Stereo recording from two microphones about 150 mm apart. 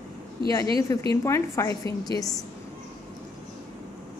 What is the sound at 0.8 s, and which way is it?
A woman's voice, 20° left (ahead or behind).